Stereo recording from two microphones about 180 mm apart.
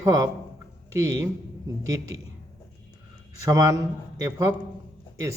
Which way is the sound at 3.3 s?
20° right (ahead or behind).